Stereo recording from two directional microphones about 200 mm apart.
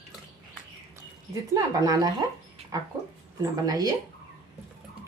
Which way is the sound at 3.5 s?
20° right (ahead or behind).